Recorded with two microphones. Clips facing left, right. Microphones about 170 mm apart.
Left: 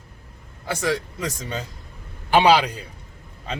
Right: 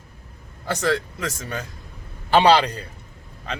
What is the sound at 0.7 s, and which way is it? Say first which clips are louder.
A man's voice: right 2 dB; 10° left (ahead or behind).